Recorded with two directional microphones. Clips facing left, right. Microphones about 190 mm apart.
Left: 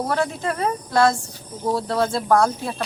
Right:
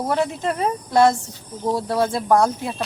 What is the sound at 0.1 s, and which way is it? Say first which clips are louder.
Speech: right 1 dB; 20° right (ahead or behind).